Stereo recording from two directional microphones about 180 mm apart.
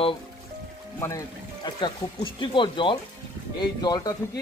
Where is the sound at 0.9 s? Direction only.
20° left (ahead or behind).